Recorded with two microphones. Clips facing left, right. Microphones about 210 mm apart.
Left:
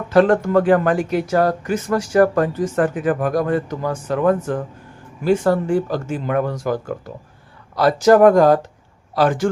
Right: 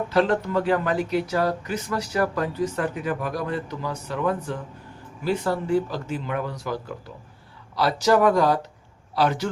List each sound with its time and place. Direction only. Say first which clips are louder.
0.1 s speech: left 9 dB; 50° left (ahead or behind)